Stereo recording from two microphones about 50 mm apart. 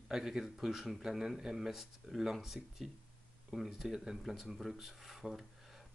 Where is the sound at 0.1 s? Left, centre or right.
Centre.